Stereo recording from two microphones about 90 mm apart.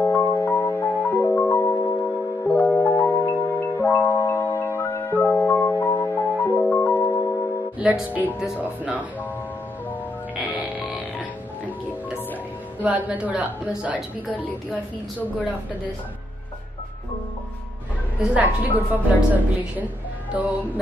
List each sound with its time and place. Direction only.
0.0 s music: 25° left (ahead or behind)
3.4 s glockenspiel: 25° left (ahead or behind)
5.4 s music: 20° left (ahead or behind)
7.8 s speech: 15° right (ahead or behind)
10.5 s music: 20° right (ahead or behind)
12.8 s speech: 15° right (ahead or behind)
14.7 s a woman's voice: 20° left (ahead or behind)
18.2 s speech: 15° right (ahead or behind)